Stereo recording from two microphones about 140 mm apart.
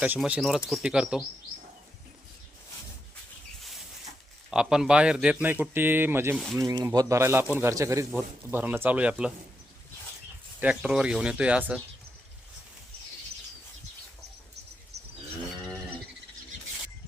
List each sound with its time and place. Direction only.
0.0 s speech: 10° right (ahead or behind)
4.5 s a man's voice: 5° right (ahead or behind)
10.6 s a man's voice: 5° right (ahead or behind)